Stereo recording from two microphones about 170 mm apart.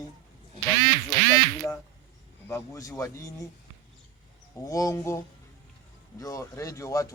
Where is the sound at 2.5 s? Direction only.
15° left (ahead or behind).